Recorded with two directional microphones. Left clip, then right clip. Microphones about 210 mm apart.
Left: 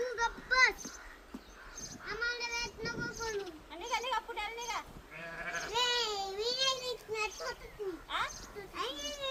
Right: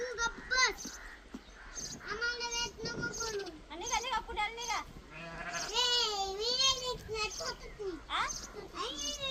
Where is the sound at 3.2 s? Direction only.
45° right (ahead or behind).